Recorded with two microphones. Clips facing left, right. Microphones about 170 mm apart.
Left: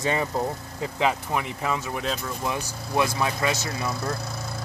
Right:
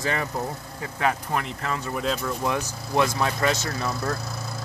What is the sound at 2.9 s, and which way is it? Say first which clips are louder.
Speech: right 1 dB; 15° left (ahead or behind).